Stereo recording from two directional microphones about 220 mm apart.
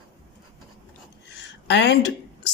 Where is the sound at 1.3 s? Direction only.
50° left (ahead or behind).